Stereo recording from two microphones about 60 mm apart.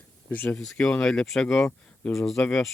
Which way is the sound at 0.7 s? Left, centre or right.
Centre.